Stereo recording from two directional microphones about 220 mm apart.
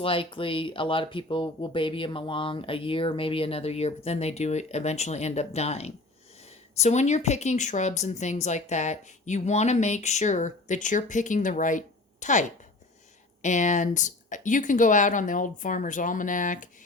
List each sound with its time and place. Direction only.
0.0 s speech: 25° left (ahead or behind)